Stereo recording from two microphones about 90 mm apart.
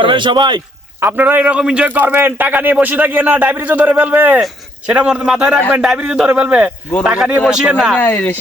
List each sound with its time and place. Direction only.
0.0 s speech: 65° right (ahead or behind)
1.0 s a man's voice: 20° right (ahead or behind)
7.9 s speech: 20° left (ahead or behind)